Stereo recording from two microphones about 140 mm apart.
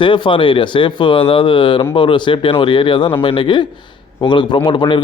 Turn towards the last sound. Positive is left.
turn(degrees=35)  # may be behind; listen again after turning